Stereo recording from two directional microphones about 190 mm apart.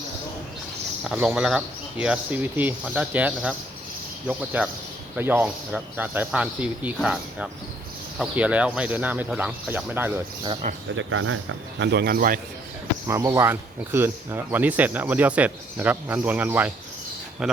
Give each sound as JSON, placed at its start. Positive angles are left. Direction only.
{"t": 1.0, "sound": "speech", "side_deg": -5}
{"t": 10.9, "sound": "speech", "side_deg": -90}
{"t": 11.8, "sound": "speech", "side_deg": -60}
{"t": 13.1, "sound": "speech", "side_deg": -15}